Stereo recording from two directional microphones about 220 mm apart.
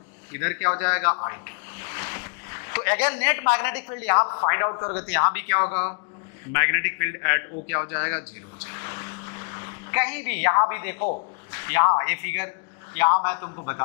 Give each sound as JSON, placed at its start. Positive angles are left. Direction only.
{"t": 0.3, "sound": "speech", "side_deg": 15}
{"t": 1.1, "sound": "a sound", "side_deg": 20}
{"t": 4.2, "sound": "a man's voice", "side_deg": 25}
{"t": 5.0, "sound": "a man's voice", "side_deg": 15}
{"t": 11.5, "sound": "a sound", "side_deg": 15}
{"t": 11.9, "sound": "a man's voice", "side_deg": 15}